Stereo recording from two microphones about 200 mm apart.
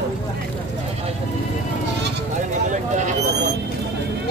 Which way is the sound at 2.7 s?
35° right (ahead or behind).